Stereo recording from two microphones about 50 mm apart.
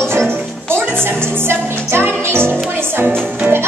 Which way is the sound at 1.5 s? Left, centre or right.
Right.